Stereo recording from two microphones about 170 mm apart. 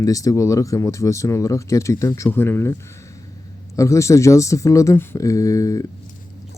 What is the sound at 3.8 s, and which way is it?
Speech, 15° left (ahead or behind).